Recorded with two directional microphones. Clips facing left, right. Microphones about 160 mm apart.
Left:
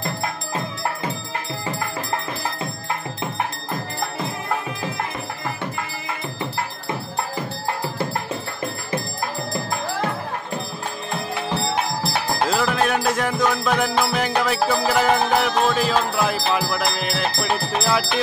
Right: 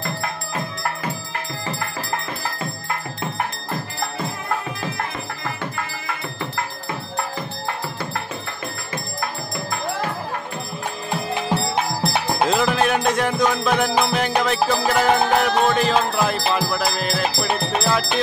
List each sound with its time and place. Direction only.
11.4 s music: centre (ahead or behind)